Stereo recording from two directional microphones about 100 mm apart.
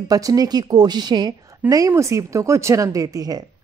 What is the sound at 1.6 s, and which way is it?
A woman's voice, 35° right (ahead or behind).